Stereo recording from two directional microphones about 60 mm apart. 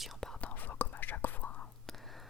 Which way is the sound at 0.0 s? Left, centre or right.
Centre.